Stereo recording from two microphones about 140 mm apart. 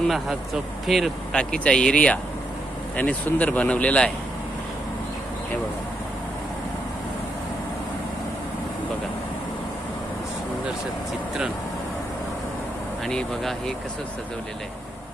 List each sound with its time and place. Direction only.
0.1 s a man's voice: centre (ahead or behind)
13.1 s a man's voice: 5° left (ahead or behind)